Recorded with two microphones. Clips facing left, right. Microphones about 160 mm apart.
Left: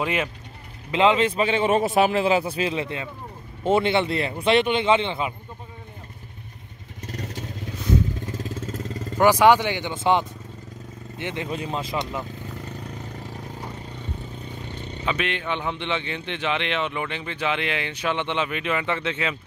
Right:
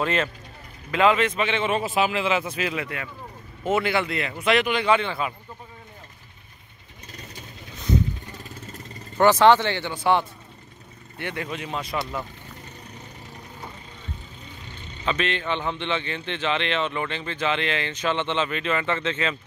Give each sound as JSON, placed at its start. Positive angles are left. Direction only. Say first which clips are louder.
{"t": 0.0, "sound": "a man's voice", "louder": "right 1 dB", "side_deg": 10}
{"t": 0.9, "sound": "a man's voice", "louder": "left 1 dB", "side_deg": 25}
{"t": 7.1, "sound": "vehicle", "louder": "left 9 dB", "side_deg": 75}
{"t": 8.3, "sound": "vehicle", "louder": "left 9 dB", "side_deg": 90}
{"t": 9.2, "sound": "a man's voice", "louder": "even", "side_deg": 10}
{"t": 15.0, "sound": "a man's voice", "louder": "right 1 dB", "side_deg": 10}